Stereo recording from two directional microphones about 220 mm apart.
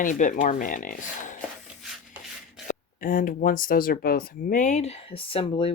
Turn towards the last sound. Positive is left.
turn(degrees=25)  # may be behind; listen again after turning